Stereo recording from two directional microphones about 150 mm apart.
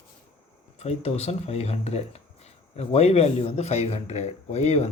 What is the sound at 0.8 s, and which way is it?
Speech, 45° left (ahead or behind).